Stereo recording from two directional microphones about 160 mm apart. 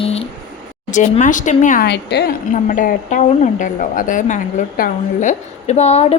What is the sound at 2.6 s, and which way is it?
A woman's voice, 55° left (ahead or behind).